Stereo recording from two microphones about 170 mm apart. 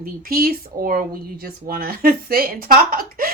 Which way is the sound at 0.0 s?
60° right (ahead or behind).